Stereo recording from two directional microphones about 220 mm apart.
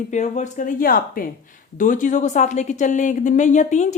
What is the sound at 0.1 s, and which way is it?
Speech, 35° left (ahead or behind).